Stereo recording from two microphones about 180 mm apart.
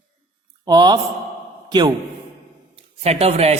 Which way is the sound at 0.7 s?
25° right (ahead or behind).